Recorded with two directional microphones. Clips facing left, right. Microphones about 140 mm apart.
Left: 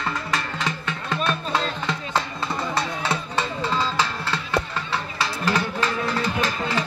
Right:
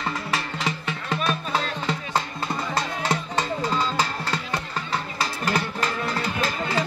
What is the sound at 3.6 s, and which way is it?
Music, 40° right (ahead or behind).